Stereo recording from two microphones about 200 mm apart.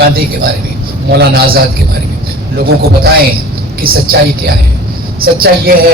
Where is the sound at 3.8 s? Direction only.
50° right (ahead or behind).